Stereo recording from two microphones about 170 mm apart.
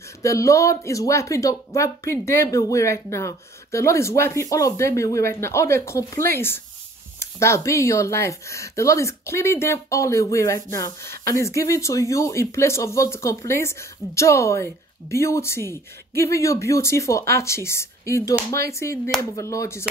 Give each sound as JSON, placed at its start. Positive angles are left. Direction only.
{"t": 0.2, "sound": "speech", "side_deg": 20}